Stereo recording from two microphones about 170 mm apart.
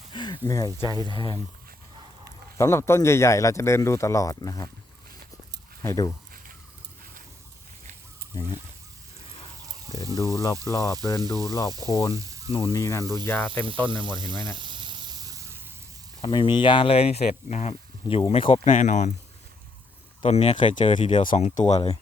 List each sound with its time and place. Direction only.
0.1 s speech: 25° left (ahead or behind)
0.9 s speech: 25° right (ahead or behind)
1.1 s speech: 25° left (ahead or behind)
2.6 s speech: 15° left (ahead or behind)
5.8 s speech: 15° left (ahead or behind)
8.3 s speech: 25° left (ahead or behind)
10.2 s speech: 20° left (ahead or behind)
12.1 s water: 20° right (ahead or behind)
12.5 s speech: 25° left (ahead or behind)
14.2 s snake: 25° right (ahead or behind)
16.2 s speech: 30° left (ahead or behind); by 19.1 s 45° left (ahead or behind)
20.2 s speech: 35° left (ahead or behind)
21.2 s speech: 45° left (ahead or behind)
21.6 s speech: 25° left (ahead or behind)